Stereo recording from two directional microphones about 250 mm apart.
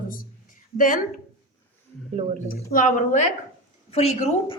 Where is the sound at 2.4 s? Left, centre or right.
Left.